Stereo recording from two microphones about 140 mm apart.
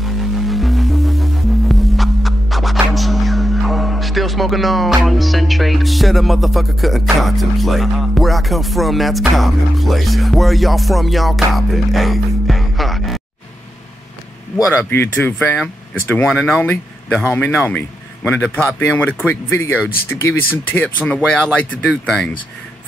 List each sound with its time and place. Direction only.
0.0 s music: centre (ahead or behind)
14.7 s speech: 15° left (ahead or behind)